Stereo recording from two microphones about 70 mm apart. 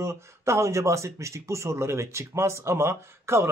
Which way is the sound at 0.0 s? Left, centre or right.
Right.